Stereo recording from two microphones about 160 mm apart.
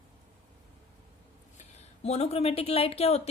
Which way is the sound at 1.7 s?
40° left (ahead or behind).